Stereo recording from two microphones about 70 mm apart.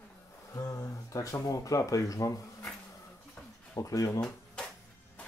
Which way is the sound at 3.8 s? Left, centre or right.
Left.